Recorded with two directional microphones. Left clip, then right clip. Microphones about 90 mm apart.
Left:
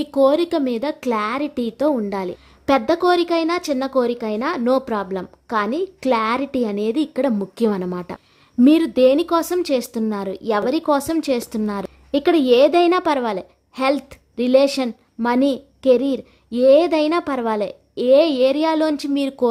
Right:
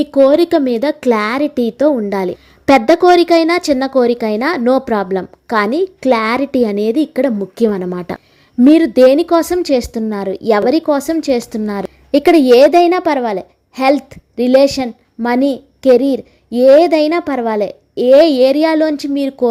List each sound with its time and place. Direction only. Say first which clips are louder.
0.1 s a woman's voice: right 6 dB; 20° right (ahead or behind)
0.3 s a woman's voice: right 8 dB; 35° right (ahead or behind)
1.4 s a woman's voice: right 8 dB; 30° right (ahead or behind)
6.0 s a woman's voice: right 4 dB; 25° right (ahead or behind)
6.9 s a woman's voice: right 6 dB; 20° right (ahead or behind)
8.1 s speech: right 9 dB; 40° right (ahead or behind)
8.6 s a woman's voice: right 6 dB; 20° right (ahead or behind)
11.0 s a woman's voice: right 6 dB; 15° right (ahead or behind)
12.7 s a woman's voice: right 5 dB; 10° right (ahead or behind)
13.7 s a woman's voice: right 7 dB; 20° right (ahead or behind)
18.8 s a woman's voice: right 5 dB; 10° right (ahead or behind)